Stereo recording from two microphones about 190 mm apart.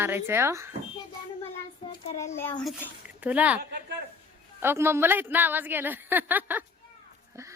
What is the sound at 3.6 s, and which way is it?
Speech, 60° right (ahead or behind).